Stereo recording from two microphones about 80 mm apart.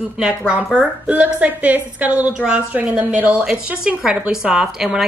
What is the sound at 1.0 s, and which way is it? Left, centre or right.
A woman's voice, centre.